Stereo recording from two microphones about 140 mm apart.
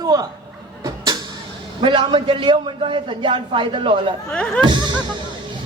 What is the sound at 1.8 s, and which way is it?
A man's voice, 35° right (ahead or behind).